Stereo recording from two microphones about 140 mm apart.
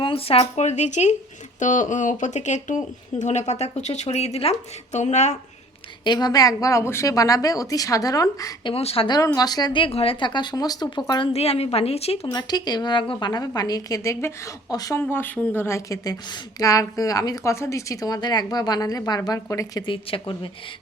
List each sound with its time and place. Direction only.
0.0 s speech: 40° left (ahead or behind)
6.1 s a woman's voice: 30° left (ahead or behind)
8.7 s speech: 45° left (ahead or behind)
9.0 s speech: 25° left (ahead or behind)
11.3 s speech: 45° left (ahead or behind)
12.3 s a woman's voice: 30° left (ahead or behind)
15.0 s a woman's voice: 10° left (ahead or behind)
19.8 s speech: 40° left (ahead or behind)